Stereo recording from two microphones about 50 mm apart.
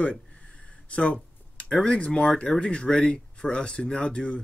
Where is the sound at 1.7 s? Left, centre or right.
Centre.